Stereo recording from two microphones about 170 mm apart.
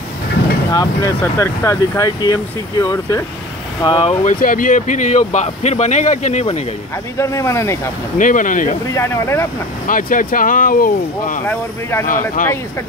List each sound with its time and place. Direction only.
0.7 s speech: 20° left (ahead or behind)
3.8 s speech: 30° left (ahead or behind)
4.2 s speech: 50° left (ahead or behind)
7.2 s speech: 20° left (ahead or behind)
8.2 s speech: 50° left (ahead or behind)
8.9 s speech: 15° left (ahead or behind)
9.8 s speech: 55° left (ahead or behind)
11.4 s speech: 15° left (ahead or behind)
12.4 s speech: 50° left (ahead or behind)